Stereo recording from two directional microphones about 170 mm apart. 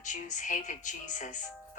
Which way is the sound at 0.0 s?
50° left (ahead or behind).